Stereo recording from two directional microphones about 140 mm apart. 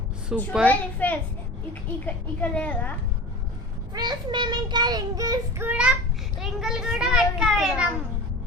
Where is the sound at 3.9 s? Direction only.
30° right (ahead or behind).